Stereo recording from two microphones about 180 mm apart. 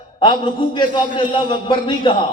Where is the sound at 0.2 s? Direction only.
25° left (ahead or behind).